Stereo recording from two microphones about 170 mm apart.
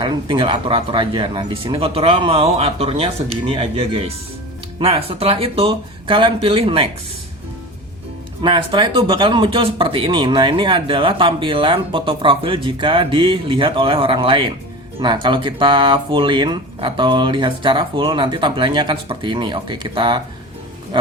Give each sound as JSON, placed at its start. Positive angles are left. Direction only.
{"t": 0.0, "sound": "speech", "side_deg": -25}
{"t": 8.4, "sound": "speech", "side_deg": -25}